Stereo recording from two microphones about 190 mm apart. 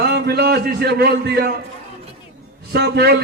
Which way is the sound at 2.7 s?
60° right (ahead or behind).